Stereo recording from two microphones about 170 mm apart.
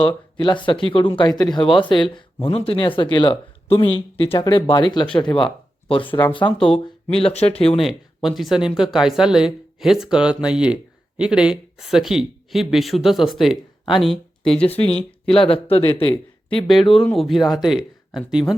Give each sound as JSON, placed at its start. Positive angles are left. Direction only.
{"t": 0.0, "sound": "speech", "side_deg": 30}
{"t": 7.8, "sound": "speech", "side_deg": 0}
{"t": 14.7, "sound": "speech", "side_deg": 35}
{"t": 17.1, "sound": "speech", "side_deg": 0}